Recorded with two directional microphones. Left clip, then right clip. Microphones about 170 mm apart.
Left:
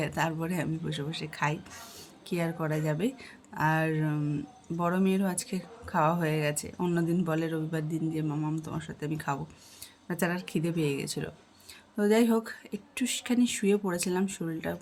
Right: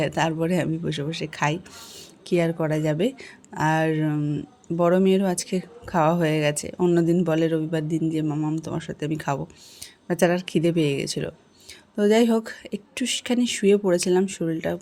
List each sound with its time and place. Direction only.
0.0 s a woman's voice: 35° right (ahead or behind)